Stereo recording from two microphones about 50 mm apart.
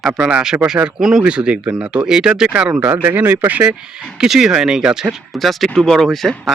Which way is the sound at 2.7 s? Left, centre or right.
Right.